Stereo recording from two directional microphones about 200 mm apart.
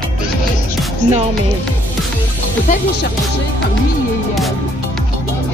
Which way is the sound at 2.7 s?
35° left (ahead or behind).